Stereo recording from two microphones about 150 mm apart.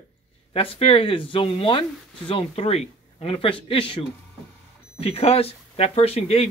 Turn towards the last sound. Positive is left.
turn(degrees=40)  # may be behind; listen again after turning